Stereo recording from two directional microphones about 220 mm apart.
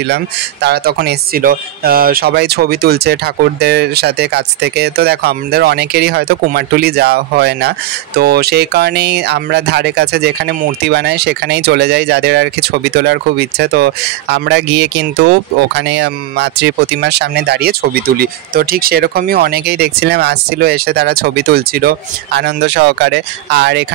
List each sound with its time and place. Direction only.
0.1 s speech: 50° right (ahead or behind)